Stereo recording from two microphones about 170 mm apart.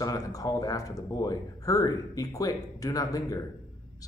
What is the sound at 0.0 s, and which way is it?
Speech, 20° left (ahead or behind).